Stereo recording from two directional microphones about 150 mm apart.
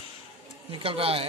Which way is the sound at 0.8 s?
40° right (ahead or behind).